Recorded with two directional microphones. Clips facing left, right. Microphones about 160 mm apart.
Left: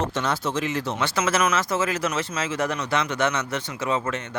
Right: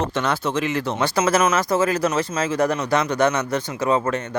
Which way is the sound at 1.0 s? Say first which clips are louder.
Right 5 dB; 40° right (ahead or behind).